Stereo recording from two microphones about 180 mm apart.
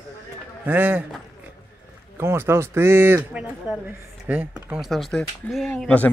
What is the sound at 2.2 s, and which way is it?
Speech, 15° right (ahead or behind).